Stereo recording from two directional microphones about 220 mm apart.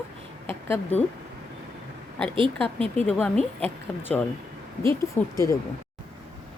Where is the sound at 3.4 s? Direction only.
25° right (ahead or behind).